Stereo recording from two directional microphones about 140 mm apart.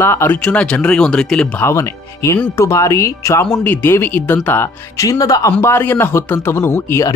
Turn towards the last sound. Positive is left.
turn(degrees=20)  # may be behind; listen again after turning